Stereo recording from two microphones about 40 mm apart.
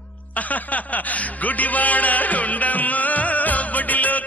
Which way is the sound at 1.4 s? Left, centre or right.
Left.